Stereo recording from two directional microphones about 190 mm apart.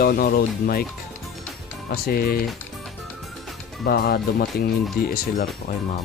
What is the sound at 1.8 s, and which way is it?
Speech, 55° left (ahead or behind).